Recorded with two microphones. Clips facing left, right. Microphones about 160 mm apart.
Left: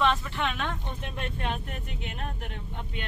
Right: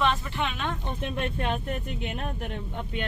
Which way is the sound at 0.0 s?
5° right (ahead or behind).